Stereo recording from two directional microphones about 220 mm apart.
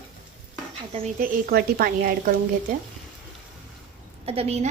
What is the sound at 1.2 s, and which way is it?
Speech, 40° right (ahead or behind).